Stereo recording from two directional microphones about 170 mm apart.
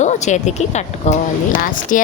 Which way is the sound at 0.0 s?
45° left (ahead or behind).